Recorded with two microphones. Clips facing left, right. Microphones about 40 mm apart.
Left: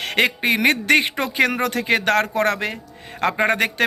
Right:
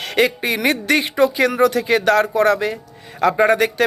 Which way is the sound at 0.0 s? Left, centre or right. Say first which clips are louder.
Right 1 dB; left.